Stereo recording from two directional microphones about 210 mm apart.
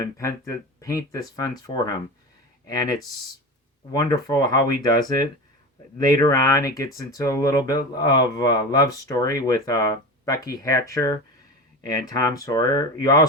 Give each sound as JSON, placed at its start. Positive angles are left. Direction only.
{"t": 0.4, "sound": "speech", "side_deg": 15}
{"t": 3.9, "sound": "speech", "side_deg": 20}